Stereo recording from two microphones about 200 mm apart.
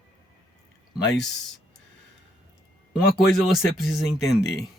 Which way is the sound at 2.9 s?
Centre (ahead or behind).